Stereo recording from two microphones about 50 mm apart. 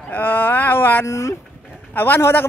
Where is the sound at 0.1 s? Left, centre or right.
Left.